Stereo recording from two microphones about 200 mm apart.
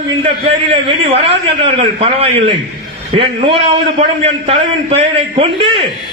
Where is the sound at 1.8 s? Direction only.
30° right (ahead or behind).